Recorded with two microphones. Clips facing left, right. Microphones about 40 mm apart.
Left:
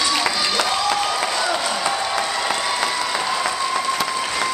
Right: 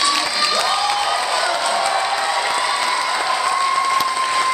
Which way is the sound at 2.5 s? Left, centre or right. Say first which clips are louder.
Right 3 dB; centre.